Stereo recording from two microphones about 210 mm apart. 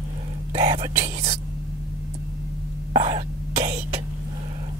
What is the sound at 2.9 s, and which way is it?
Cough, 25° right (ahead or behind).